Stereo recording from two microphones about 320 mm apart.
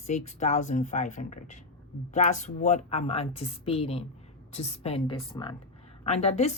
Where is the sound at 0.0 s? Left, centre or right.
Left.